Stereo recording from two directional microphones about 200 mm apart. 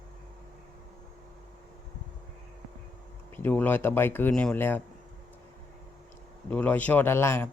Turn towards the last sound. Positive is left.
turn(degrees=10)  # may be behind; listen again after turning